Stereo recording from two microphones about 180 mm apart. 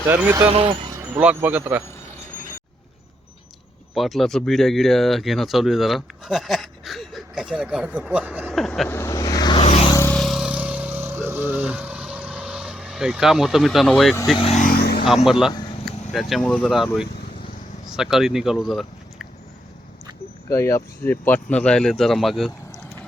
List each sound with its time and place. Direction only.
0.1 s speech: 10° right (ahead or behind)
0.5 s speech: 30° right (ahead or behind)
0.9 s speech: 10° right (ahead or behind)
3.9 s speech: centre (ahead or behind)
8.9 s vehicle: 15° left (ahead or behind)
9.6 s a sound: 35° left (ahead or behind)
9.9 s a sound: 15° left (ahead or behind)
10.2 s vehicle: centre (ahead or behind)
14.3 s speech: 30° left (ahead or behind)
14.6 s vehicle: 55° left (ahead or behind)
15.0 s speech: centre (ahead or behind)
20.5 s speech: 15° left (ahead or behind); by 22.5 s centre (ahead or behind)